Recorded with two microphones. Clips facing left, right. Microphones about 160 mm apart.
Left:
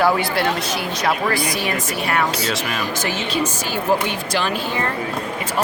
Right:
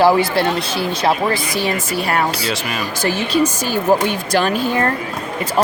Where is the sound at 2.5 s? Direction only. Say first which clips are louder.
Right 1 dB; centre (ahead or behind).